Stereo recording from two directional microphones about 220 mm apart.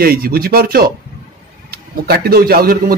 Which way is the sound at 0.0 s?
45° right (ahead or behind).